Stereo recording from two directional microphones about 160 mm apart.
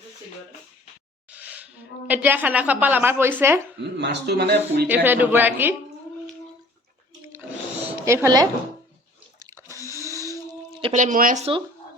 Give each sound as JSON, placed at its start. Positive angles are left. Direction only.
{"t": 1.3, "sound": "a woman's voice", "side_deg": -10}
{"t": 3.8, "sound": "a man's voice", "side_deg": -90}
{"t": 4.9, "sound": "a woman's voice", "side_deg": -10}
{"t": 7.9, "sound": "speech", "side_deg": -15}
{"t": 9.7, "sound": "a sound", "side_deg": 20}
{"t": 10.0, "sound": "a sound", "side_deg": -20}
{"t": 10.9, "sound": "speech", "side_deg": -55}